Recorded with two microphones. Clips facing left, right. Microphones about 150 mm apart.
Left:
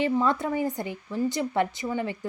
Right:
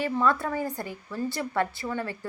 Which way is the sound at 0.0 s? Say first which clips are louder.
Left 1 dB; 20° left (ahead or behind).